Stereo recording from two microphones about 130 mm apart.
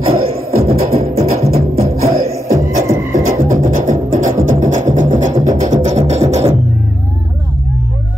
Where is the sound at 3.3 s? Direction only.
90° right; by 6.5 s 55° right (ahead or behind).